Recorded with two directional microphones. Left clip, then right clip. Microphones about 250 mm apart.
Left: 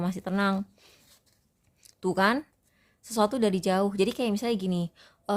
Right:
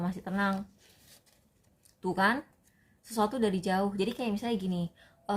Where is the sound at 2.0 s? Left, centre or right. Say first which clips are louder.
Left 3 dB; left.